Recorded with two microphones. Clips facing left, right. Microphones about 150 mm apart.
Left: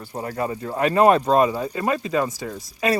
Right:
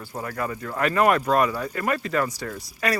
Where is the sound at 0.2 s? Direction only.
25° left (ahead or behind).